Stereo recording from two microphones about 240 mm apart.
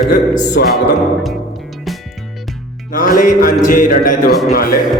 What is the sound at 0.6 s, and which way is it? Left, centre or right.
Speech, left.